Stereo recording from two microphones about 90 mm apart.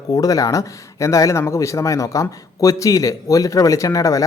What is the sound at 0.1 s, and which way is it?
Speech, 40° left (ahead or behind).